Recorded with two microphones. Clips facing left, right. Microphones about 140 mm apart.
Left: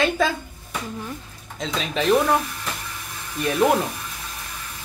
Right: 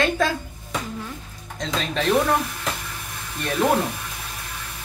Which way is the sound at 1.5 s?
Centre (ahead or behind).